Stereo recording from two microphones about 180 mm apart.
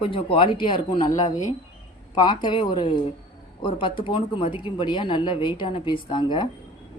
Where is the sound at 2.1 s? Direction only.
25° left (ahead or behind).